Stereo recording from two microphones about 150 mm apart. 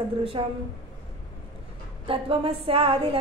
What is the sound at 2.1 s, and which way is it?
Speech, 40° right (ahead or behind).